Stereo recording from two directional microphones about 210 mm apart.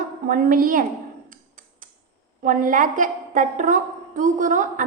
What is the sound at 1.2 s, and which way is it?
Tick, 40° right (ahead or behind).